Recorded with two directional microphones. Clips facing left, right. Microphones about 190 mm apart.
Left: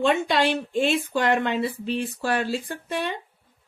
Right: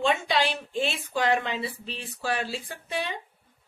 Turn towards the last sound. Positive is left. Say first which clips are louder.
# left 4 dB
turn(degrees=50)  # may be behind; listen again after turning